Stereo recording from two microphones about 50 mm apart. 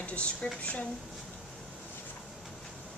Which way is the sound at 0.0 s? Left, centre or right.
Left.